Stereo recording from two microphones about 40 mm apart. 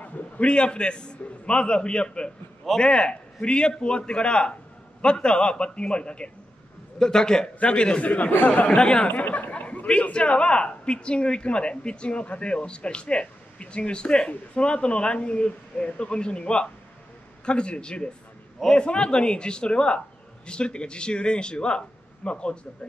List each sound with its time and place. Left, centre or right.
0.4 s a man's voice: left
8.0 s speech: left
8.6 s speech: left
9.1 s speech: left
9.5 s a sound: left
10.1 s speech: left